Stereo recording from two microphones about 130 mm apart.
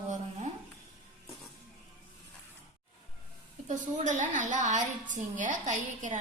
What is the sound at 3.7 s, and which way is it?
A woman's voice, 70° right (ahead or behind).